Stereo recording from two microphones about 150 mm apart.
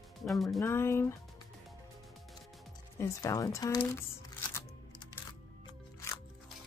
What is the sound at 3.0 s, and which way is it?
Speech, 20° left (ahead or behind).